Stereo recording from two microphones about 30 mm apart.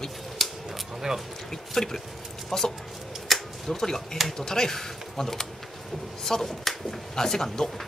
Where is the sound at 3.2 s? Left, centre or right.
Centre.